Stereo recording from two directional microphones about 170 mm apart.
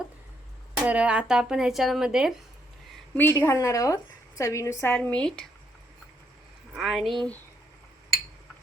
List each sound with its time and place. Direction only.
0.9 s speech: 5° right (ahead or behind)
3.2 s a woman's voice: 10° left (ahead or behind)
6.7 s speech: centre (ahead or behind)